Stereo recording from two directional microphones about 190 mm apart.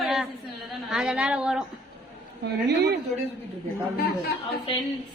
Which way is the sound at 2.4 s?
60° right (ahead or behind).